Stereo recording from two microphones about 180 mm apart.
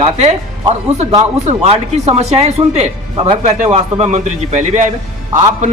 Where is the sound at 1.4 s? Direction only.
35° right (ahead or behind).